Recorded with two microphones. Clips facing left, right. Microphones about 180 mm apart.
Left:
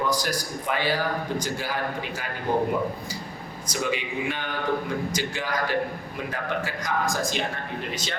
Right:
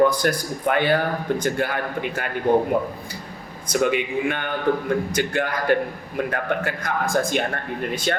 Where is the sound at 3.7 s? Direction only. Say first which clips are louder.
Right 7 dB; 55° right (ahead or behind).